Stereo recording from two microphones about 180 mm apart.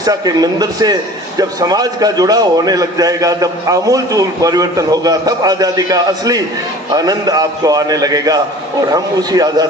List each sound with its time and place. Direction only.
0.0 s a man's voice: 20° right (ahead or behind)